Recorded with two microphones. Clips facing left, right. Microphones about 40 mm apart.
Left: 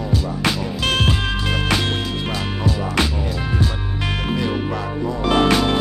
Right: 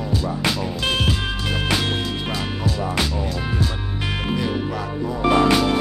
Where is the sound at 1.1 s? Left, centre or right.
Left.